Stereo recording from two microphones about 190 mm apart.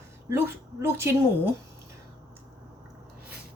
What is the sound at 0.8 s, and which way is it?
Speech, 15° right (ahead or behind).